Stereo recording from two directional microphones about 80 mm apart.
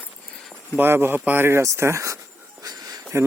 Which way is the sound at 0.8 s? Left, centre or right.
Right.